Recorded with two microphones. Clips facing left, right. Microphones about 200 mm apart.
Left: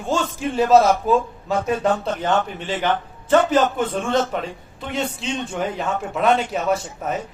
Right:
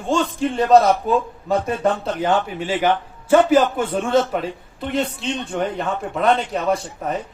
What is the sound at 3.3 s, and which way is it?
Speech, 10° right (ahead or behind).